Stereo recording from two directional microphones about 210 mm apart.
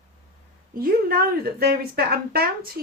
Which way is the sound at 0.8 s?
45° right (ahead or behind).